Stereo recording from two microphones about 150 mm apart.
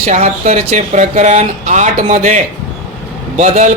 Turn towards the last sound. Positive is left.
turn(degrees=-55)  # may be behind; listen again after turning